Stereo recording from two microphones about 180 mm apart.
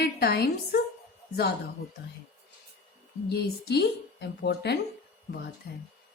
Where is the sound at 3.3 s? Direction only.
65° left (ahead or behind).